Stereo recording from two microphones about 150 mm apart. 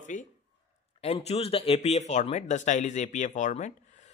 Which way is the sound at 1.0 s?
45° left (ahead or behind).